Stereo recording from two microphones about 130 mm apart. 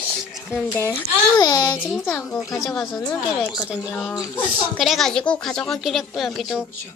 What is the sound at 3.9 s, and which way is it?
Speech, 15° left (ahead or behind).